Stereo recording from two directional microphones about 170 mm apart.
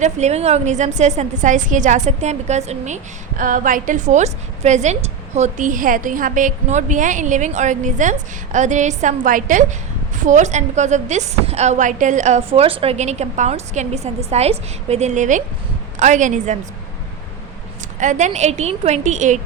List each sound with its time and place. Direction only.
0.0 s a woman's voice: 40° right (ahead or behind)
18.0 s a woman's voice: 45° right (ahead or behind)